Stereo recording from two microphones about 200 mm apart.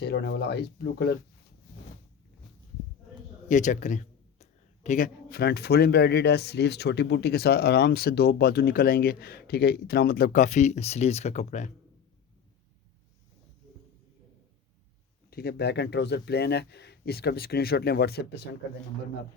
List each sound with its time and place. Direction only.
0.0 s a man's voice: 55° left (ahead or behind)
3.5 s a man's voice: 40° left (ahead or behind)
15.3 s a man's voice: 50° left (ahead or behind)